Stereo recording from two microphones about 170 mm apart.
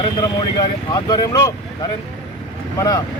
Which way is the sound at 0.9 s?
20° left (ahead or behind).